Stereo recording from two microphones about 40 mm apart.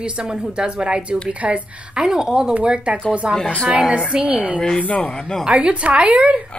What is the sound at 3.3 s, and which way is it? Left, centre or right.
Speech, centre.